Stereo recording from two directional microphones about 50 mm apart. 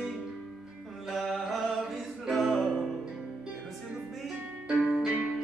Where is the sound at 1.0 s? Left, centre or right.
Centre.